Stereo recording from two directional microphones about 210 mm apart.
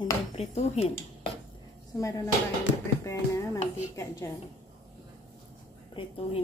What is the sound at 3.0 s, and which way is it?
Music, 15° left (ahead or behind).